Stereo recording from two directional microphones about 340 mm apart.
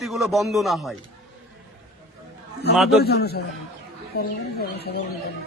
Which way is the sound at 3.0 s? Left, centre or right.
Left.